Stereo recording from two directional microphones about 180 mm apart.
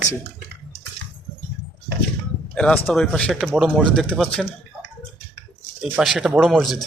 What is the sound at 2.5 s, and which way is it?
Speech, 5° left (ahead or behind).